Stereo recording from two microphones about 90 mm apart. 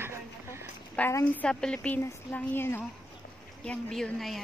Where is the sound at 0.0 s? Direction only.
30° right (ahead or behind).